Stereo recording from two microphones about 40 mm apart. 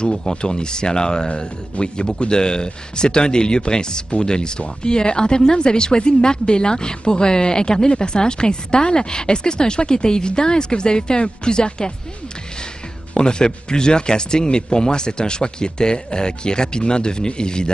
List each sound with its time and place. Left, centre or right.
0.0 s speech: centre
13.1 s speech: left